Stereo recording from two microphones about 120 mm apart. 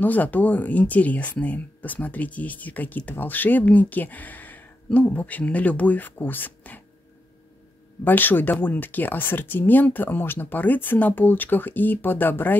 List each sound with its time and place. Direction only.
0.0 s speech: 15° left (ahead or behind)
8.0 s speech: 15° left (ahead or behind)